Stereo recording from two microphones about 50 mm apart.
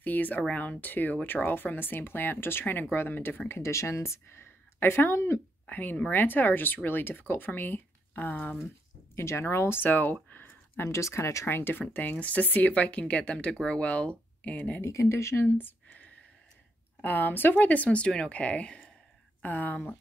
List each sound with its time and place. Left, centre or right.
0.0 s speech: left
5.7 s speech: left
9.1 s speech: left
9.8 s speech: left
10.3 s a sound: left
10.9 s speech: left
11.4 s speech: left
11.9 s speech: left
14.9 s speech: left
15.5 s a sound: left
17.0 s speech: left
19.4 s speech: left